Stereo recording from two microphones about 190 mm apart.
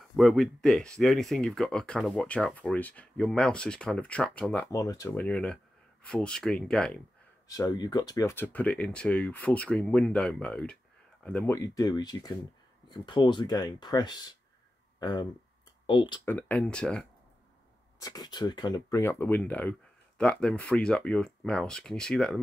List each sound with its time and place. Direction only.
0.1 s speech: centre (ahead or behind)
4.7 s speech: 15° left (ahead or behind)
7.4 s speech: 20° left (ahead or behind)
16.3 s speech: 10° left (ahead or behind)
17.9 s speech: 20° left (ahead or behind); by 22.4 s 5° left (ahead or behind)